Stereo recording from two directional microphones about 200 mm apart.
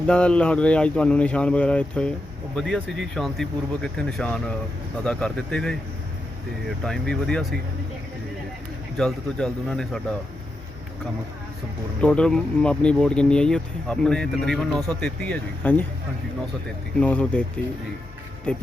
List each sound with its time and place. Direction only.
0.1 s speech: 5° left (ahead or behind)
9.0 s speech: centre (ahead or behind)
11.9 s speech: 5° left (ahead or behind)
17.0 s speech: 5° left (ahead or behind)